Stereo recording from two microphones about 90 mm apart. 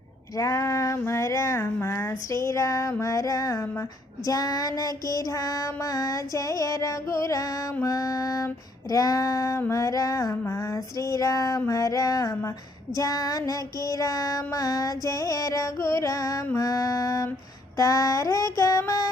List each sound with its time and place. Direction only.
0.3 s child singing: 40° left (ahead or behind)
17.7 s mantra: 40° left (ahead or behind)